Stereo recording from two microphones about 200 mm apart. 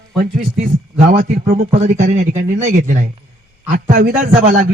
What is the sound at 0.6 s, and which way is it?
Speech, 35° right (ahead or behind).